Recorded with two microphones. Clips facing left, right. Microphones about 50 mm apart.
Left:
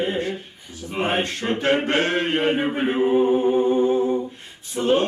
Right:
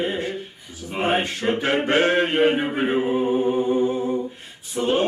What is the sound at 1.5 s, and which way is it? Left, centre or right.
A capella, centre.